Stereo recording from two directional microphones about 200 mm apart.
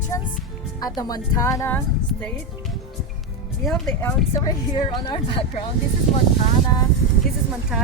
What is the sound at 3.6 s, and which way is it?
Speech, 5° left (ahead or behind).